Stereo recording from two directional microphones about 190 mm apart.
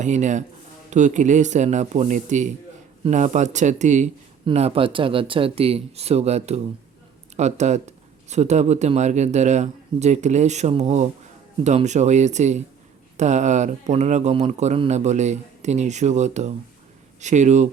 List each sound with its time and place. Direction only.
0.0 s speech: 40° right (ahead or behind)